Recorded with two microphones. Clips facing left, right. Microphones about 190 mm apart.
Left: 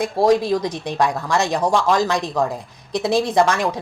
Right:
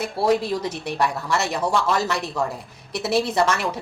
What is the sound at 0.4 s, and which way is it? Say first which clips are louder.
A woman's voice: left 4 dB; 15° left (ahead or behind).